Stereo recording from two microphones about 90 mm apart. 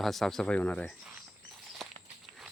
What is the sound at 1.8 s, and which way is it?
Walk, centre (ahead or behind).